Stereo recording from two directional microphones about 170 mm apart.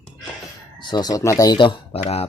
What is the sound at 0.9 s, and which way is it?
Speech, 20° left (ahead or behind).